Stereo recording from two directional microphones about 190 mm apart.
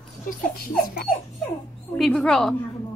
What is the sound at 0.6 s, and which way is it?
Speech, 50° left (ahead or behind).